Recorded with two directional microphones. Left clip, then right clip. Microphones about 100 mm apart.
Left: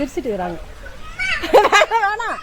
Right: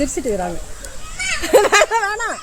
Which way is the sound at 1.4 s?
45° right (ahead or behind).